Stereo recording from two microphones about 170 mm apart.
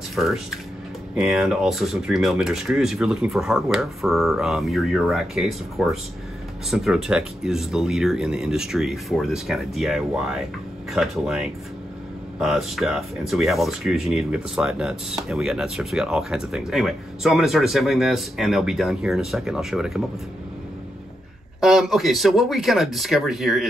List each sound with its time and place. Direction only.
0.1 s speech: centre (ahead or behind)
21.5 s speech: centre (ahead or behind)